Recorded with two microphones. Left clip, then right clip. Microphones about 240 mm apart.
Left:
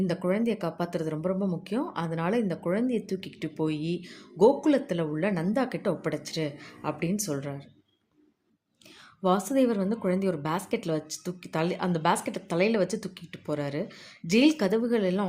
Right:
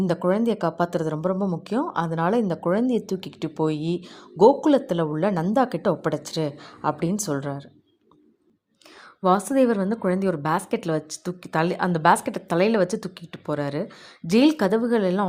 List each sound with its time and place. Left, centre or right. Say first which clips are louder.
0.0 s speech: right 6 dB; right
9.2 s speech: right 5 dB; centre